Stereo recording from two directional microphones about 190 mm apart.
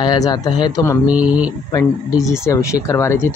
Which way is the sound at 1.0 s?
5° right (ahead or behind).